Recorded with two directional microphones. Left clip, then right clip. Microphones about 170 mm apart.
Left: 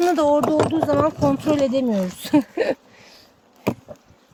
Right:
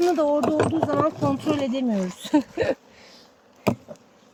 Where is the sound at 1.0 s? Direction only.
55° left (ahead or behind); by 2.8 s 40° left (ahead or behind).